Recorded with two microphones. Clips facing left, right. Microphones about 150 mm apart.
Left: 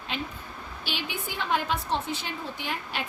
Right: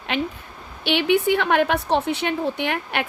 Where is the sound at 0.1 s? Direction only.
70° right (ahead or behind).